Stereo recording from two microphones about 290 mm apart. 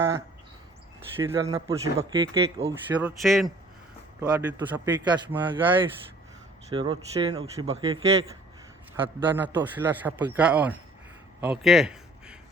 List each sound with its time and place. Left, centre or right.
1.1 s speech: centre
3.2 s a man's voice: centre
6.7 s speech: centre
9.2 s a man's voice: centre
11.3 s a sound: centre